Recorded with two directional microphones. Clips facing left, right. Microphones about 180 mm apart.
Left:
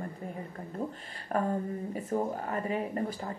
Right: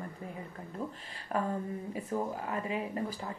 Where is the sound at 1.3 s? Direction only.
40° left (ahead or behind).